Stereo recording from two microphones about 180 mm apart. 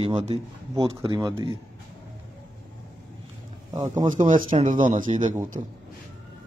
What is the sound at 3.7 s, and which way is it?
Speech, 20° right (ahead or behind).